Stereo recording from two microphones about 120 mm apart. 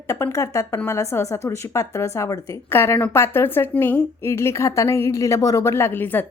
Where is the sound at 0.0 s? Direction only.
25° left (ahead or behind).